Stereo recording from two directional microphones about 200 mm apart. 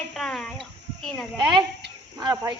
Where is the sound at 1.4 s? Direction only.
20° right (ahead or behind).